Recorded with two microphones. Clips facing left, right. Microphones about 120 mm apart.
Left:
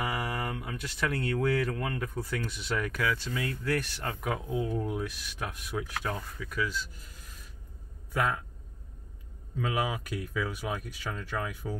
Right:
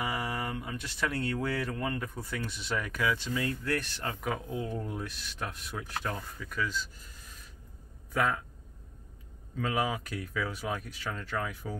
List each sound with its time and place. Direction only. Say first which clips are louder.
0.0 s a sound: left 1 dB; 10° left (ahead or behind)
1.7 s speech: left 1 dB; centre (ahead or behind)
2.5 s speech: left 1 dB; 10° left (ahead or behind)
3.0 s speech: right 1 dB; 5° right (ahead or behind)
8.1 s speech: even; 5° left (ahead or behind)
9.6 s speech: even; 5° left (ahead or behind)